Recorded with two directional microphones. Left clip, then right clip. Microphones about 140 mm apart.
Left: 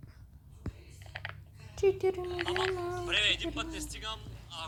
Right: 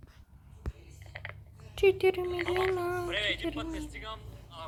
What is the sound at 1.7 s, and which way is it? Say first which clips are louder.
Speech: right 3 dB; 20° right (ahead or behind).